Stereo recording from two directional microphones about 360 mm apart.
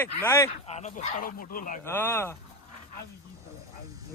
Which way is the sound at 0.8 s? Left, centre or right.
Left.